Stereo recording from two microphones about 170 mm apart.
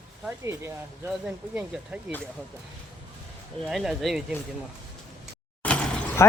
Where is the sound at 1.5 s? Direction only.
5° right (ahead or behind).